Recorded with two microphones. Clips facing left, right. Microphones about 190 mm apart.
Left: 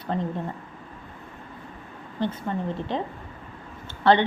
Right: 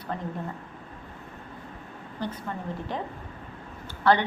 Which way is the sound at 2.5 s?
25° left (ahead or behind).